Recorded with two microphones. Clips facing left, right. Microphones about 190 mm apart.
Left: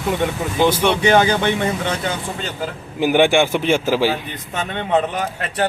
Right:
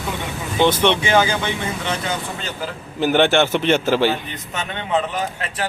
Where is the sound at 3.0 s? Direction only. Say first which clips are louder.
Left 1 dB; 10° left (ahead or behind).